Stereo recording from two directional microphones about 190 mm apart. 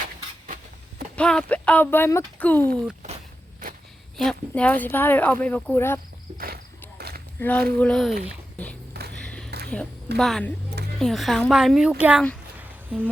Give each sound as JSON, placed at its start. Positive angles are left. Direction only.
{"t": 1.1, "sound": "speech", "side_deg": 5}
{"t": 4.2, "sound": "speech", "side_deg": 5}
{"t": 6.3, "sound": "cricket", "side_deg": -50}
{"t": 7.3, "sound": "a woman's voice", "side_deg": 5}
{"t": 9.1, "sound": "a sound", "side_deg": 5}
{"t": 10.2, "sound": "a woman's voice", "side_deg": 0}